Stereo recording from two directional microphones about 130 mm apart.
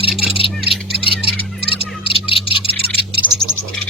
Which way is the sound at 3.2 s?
10° right (ahead or behind).